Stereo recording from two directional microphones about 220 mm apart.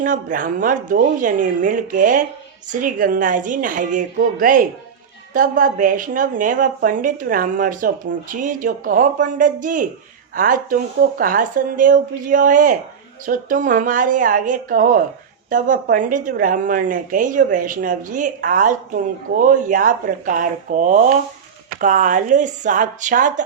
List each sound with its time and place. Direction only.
0.0 s a woman's voice: 40° right (ahead or behind)